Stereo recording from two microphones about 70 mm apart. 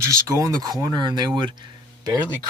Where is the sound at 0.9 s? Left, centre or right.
Right.